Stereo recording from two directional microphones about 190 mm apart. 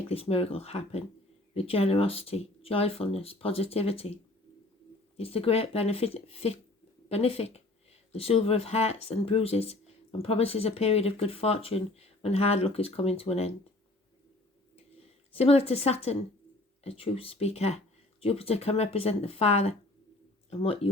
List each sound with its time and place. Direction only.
0.1 s speech: 30° left (ahead or behind)
15.3 s speech: 30° left (ahead or behind)